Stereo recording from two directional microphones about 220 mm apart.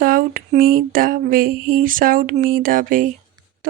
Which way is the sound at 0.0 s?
40° right (ahead or behind).